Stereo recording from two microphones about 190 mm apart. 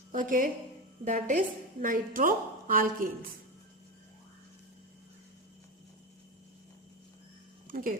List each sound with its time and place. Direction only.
0.1 s a woman's voice: 45° right (ahead or behind)
7.7 s speech: 45° right (ahead or behind)